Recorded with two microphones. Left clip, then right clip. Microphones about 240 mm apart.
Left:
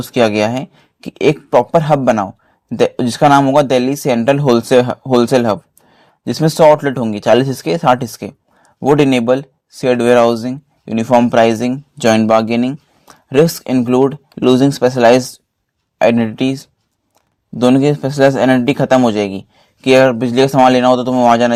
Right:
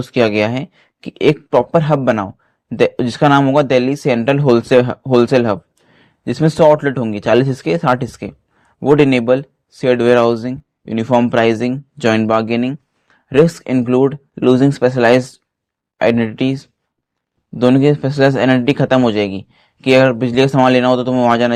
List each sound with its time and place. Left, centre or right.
0.0 s speech: left